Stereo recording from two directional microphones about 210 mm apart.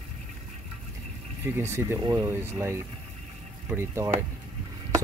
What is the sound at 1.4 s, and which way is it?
Speech, 10° right (ahead or behind).